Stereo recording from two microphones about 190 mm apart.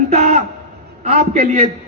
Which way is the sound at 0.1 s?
40° right (ahead or behind).